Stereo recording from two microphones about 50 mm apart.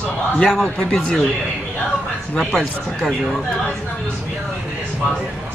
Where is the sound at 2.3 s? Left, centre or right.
Centre.